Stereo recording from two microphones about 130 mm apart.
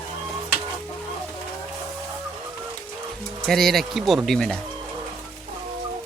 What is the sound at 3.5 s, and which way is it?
Speech, centre (ahead or behind).